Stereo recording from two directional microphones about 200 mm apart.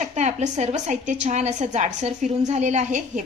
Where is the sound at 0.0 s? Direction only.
35° right (ahead or behind).